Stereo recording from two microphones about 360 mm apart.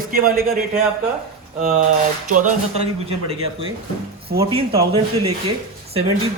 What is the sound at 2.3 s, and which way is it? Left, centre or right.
A man's voice, centre.